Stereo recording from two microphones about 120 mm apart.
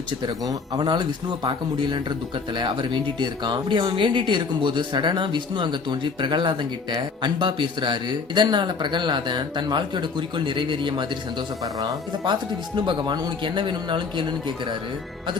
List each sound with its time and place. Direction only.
0.4 s speech: 30° right (ahead or behind)
11.6 s speech: 30° right (ahead or behind)